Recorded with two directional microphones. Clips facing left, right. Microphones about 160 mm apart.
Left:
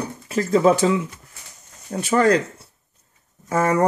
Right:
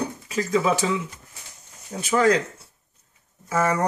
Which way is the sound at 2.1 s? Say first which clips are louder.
Left 2 dB; 55° left (ahead or behind).